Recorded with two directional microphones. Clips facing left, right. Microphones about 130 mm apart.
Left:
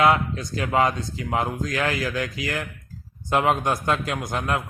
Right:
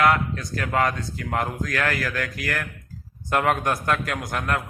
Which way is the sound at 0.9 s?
60° right (ahead or behind).